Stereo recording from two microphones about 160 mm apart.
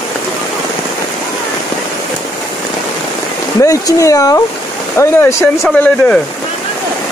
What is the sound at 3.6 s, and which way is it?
Speech, 20° left (ahead or behind).